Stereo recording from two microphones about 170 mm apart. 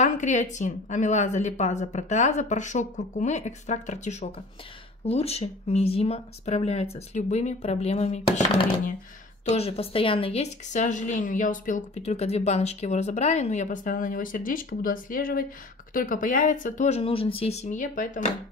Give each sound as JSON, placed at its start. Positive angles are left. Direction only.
{"t": 0.0, "sound": "speech", "side_deg": 45}
{"t": 9.5, "sound": "speech", "side_deg": 35}